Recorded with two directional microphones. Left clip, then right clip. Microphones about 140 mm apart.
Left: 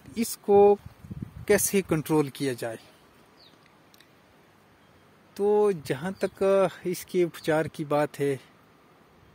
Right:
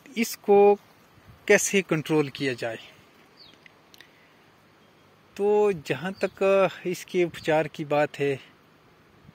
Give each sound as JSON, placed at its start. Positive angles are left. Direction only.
{"t": 0.1, "sound": "speech", "side_deg": 10}
{"t": 5.3, "sound": "speech", "side_deg": 30}